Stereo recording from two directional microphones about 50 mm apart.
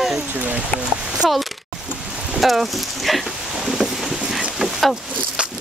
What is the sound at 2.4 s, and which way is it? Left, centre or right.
Speech, centre.